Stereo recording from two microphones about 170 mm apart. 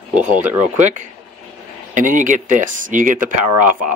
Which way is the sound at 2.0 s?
50° right (ahead or behind).